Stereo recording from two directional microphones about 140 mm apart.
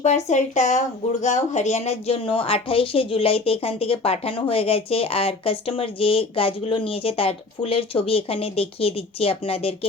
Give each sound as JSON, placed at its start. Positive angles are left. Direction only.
{"t": 0.3, "sound": "speech", "side_deg": 55}